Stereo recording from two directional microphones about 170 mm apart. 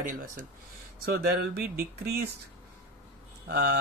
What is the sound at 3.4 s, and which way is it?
Speech, 65° right (ahead or behind).